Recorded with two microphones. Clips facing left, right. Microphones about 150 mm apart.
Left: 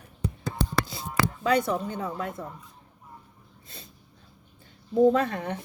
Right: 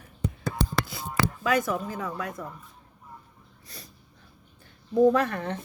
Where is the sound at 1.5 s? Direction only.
25° left (ahead or behind).